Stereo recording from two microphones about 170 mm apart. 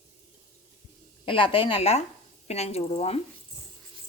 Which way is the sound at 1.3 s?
30° left (ahead or behind).